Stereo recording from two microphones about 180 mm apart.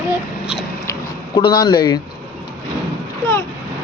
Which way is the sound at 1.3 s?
20° left (ahead or behind).